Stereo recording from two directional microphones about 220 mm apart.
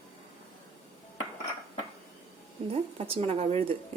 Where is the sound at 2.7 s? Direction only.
30° right (ahead or behind).